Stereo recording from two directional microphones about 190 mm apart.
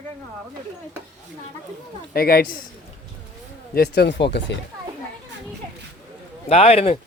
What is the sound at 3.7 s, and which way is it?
Speech, 55° left (ahead or behind).